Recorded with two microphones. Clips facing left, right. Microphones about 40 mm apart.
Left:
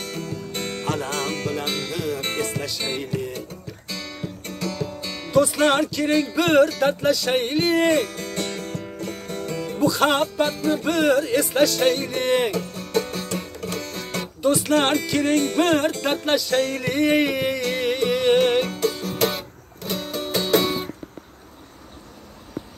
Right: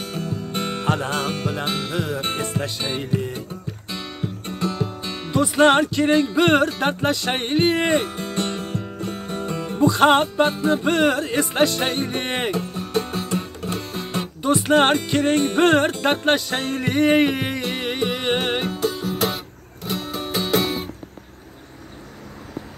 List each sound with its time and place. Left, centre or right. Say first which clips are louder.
0.0 s music: right 2 dB; centre
5.4 s music: right 3 dB; right
9.8 s music: right 4 dB; right
12.5 s music: even; right
14.4 s music: right 2 dB; right
17.6 s music: left 2 dB; right
18.4 s music: left 3 dB; centre